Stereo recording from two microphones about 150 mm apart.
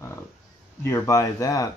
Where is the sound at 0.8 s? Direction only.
20° left (ahead or behind).